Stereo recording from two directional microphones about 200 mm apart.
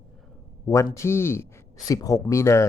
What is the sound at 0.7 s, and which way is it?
Speech, 15° left (ahead or behind).